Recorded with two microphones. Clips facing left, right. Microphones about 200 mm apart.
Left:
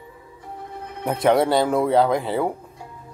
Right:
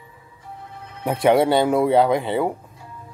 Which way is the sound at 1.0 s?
Centre (ahead or behind).